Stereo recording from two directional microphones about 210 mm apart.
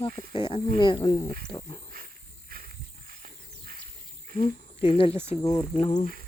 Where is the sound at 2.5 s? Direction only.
45° right (ahead or behind).